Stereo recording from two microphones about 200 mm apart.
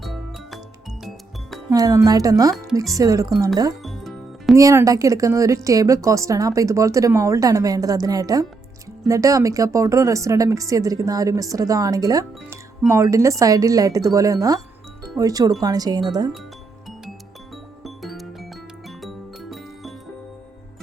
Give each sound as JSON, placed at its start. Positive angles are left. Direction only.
{"t": 0.0, "sound": "music", "side_deg": 0}
{"t": 1.7, "sound": "a woman's voice", "side_deg": -20}
{"t": 3.8, "sound": "music", "side_deg": 0}
{"t": 4.5, "sound": "a woman's voice", "side_deg": -15}
{"t": 17.5, "sound": "music", "side_deg": 0}